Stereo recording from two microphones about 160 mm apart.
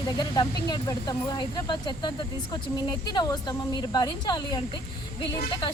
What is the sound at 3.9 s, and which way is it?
Speech, 25° left (ahead or behind).